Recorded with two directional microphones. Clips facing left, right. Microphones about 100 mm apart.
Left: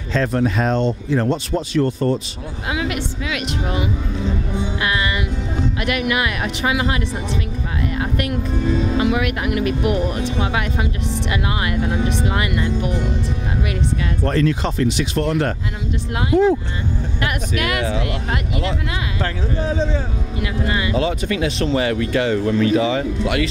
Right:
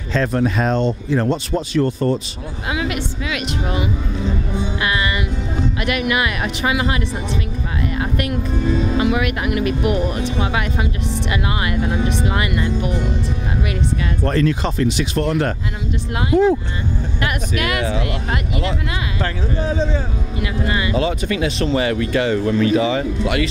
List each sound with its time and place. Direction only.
0.1 s speech: 15° right (ahead or behind)
8.0 s speech: 15° right (ahead or behind)
14.2 s speech: 15° right (ahead or behind)
17.2 s speech: 15° right (ahead or behind)